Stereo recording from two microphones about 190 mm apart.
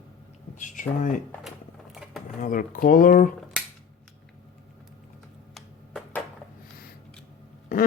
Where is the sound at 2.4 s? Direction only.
45° left (ahead or behind).